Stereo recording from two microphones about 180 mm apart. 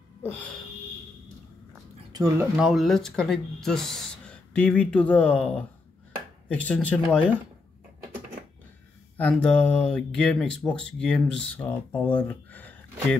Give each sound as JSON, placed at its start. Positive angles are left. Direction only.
{"t": 0.2, "sound": "a sound", "side_deg": 10}
{"t": 2.1, "sound": "speech", "side_deg": -20}
{"t": 2.5, "sound": "speech", "side_deg": 0}
{"t": 9.1, "sound": "speech", "side_deg": 5}